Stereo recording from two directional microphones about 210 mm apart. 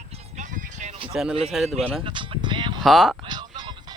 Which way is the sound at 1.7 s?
30° right (ahead or behind).